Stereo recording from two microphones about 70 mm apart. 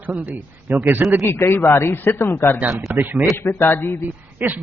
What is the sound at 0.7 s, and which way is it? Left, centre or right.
Speech, right.